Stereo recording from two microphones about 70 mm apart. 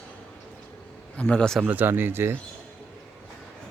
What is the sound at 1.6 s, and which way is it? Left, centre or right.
Speech, right.